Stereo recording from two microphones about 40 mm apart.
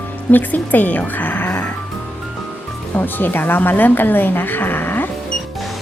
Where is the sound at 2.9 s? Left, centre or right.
Left.